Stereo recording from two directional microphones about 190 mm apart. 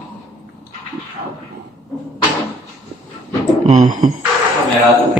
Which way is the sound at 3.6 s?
40° right (ahead or behind).